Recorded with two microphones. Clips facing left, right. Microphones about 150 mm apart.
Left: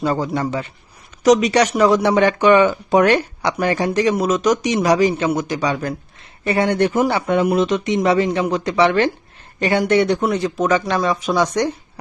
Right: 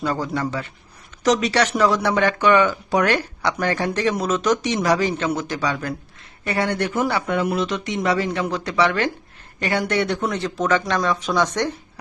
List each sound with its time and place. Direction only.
0.0 s speech: 25° left (ahead or behind)